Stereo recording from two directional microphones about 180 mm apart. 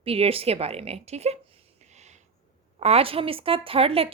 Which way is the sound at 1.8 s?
40° right (ahead or behind).